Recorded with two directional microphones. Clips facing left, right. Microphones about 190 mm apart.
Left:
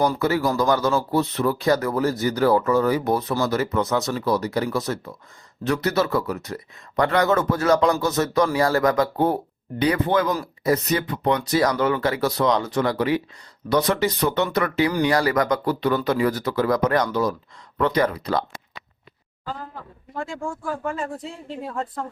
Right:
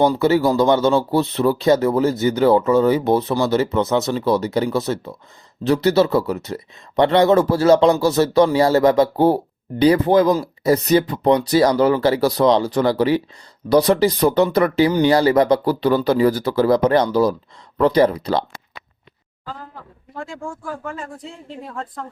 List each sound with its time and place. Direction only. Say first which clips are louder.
0.0 s speech: right 5 dB; 25° right (ahead or behind)